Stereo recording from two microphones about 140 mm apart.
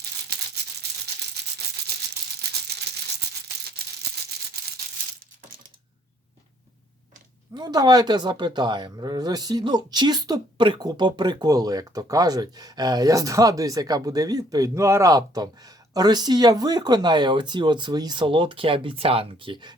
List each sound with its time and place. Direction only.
7.5 s speech: 30° right (ahead or behind)